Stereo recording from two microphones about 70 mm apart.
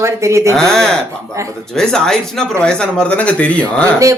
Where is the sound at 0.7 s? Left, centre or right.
Centre.